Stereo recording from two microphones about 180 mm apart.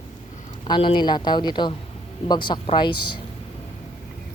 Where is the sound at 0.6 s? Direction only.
25° left (ahead or behind).